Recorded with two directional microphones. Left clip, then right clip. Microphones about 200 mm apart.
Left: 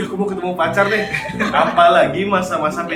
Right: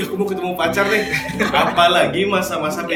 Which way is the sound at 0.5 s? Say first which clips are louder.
Left 2 dB; 35° right (ahead or behind).